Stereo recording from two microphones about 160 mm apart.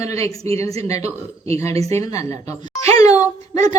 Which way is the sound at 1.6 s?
20° left (ahead or behind).